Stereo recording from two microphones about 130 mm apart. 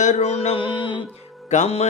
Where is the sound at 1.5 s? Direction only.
55° left (ahead or behind).